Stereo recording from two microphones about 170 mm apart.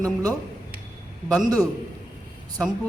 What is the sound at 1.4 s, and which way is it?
Speech, 20° right (ahead or behind).